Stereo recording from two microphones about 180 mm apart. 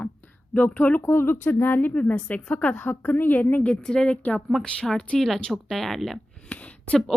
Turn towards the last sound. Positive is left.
turn(degrees=5)  # may be behind; listen again after turning